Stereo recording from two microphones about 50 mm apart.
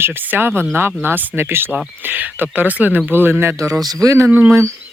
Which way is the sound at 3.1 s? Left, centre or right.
Right.